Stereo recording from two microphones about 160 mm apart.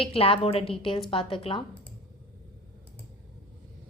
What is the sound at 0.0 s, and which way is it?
A woman's voice, 35° left (ahead or behind).